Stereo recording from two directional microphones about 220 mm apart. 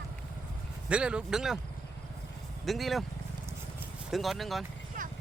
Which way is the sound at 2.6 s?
Centre (ahead or behind).